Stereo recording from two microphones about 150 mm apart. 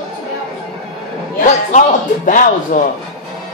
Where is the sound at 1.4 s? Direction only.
55° left (ahead or behind).